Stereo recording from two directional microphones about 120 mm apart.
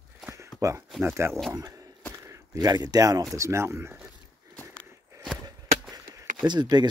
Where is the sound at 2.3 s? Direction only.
30° right (ahead or behind).